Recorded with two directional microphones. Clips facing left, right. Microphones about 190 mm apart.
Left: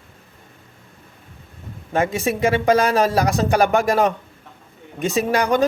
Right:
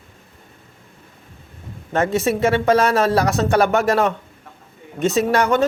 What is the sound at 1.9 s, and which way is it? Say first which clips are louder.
Speech: right 2 dB; 10° left (ahead or behind).